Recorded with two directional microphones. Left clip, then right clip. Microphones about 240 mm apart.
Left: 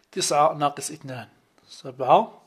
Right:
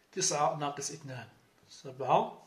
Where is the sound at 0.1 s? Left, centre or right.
Left.